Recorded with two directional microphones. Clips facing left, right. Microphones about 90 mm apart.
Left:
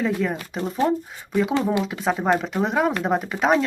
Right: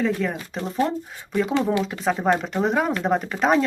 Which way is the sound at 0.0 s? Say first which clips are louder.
Even; 5° left (ahead or behind).